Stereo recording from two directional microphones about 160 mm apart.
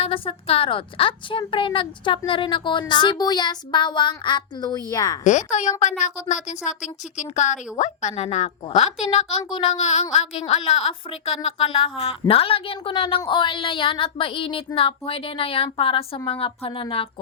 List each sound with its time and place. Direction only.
0.0 s a woman's voice: 35° left (ahead or behind)
5.2 s a woman's voice: 50° left (ahead or behind)